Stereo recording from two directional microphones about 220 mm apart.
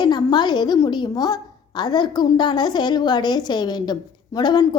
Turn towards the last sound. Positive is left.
turn(degrees=20)  # may be behind; listen again after turning